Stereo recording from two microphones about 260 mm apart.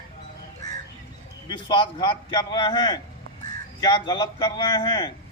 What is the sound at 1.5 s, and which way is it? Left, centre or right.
A man's voice, centre.